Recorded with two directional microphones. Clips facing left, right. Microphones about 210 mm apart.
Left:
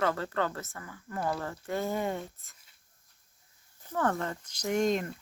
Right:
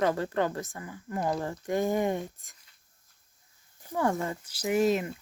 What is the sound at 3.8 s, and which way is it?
Speech, 10° right (ahead or behind).